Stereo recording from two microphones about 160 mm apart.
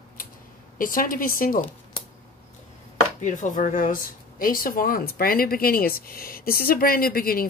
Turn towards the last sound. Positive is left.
turn(degrees=65)  # may be behind; listen again after turning